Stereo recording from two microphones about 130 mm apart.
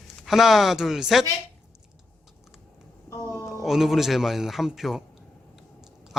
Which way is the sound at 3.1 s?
20° left (ahead or behind).